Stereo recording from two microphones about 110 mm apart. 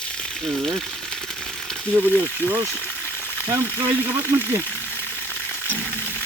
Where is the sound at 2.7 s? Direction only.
15° left (ahead or behind).